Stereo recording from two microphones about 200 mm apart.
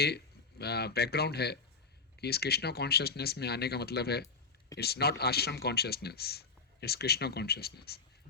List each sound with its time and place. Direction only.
0.6 s speech: 55° left (ahead or behind)